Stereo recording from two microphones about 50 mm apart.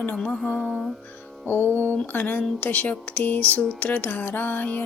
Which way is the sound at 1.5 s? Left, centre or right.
Left.